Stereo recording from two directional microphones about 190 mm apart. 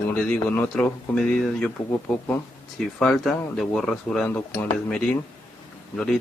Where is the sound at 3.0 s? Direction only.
5° left (ahead or behind).